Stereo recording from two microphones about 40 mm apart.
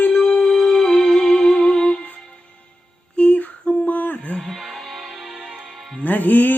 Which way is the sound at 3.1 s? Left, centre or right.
Left.